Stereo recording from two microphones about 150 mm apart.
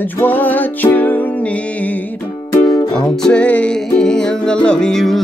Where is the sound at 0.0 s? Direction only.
10° left (ahead or behind).